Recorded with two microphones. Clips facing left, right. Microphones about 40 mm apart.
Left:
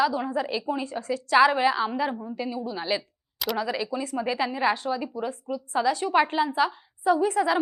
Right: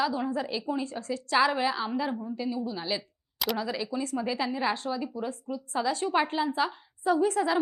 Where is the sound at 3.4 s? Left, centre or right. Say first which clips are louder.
Left 1 dB; centre.